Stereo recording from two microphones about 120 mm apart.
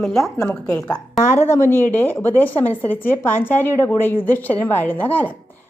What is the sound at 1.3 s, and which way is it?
A woman's voice, 20° left (ahead or behind).